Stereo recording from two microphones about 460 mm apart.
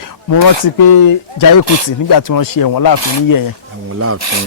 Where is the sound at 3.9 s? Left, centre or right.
Right.